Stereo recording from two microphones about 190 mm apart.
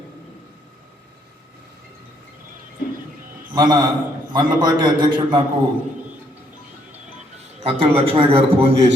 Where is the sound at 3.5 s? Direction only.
25° right (ahead or behind).